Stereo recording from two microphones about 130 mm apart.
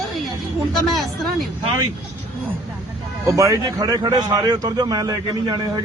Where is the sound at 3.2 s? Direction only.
25° right (ahead or behind).